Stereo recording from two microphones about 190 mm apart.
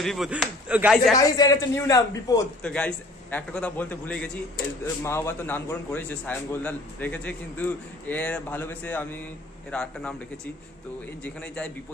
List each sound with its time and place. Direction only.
0.0 s speech: centre (ahead or behind)
1.1 s a man's voice: 20° left (ahead or behind)
2.6 s a man's voice: 5° left (ahead or behind)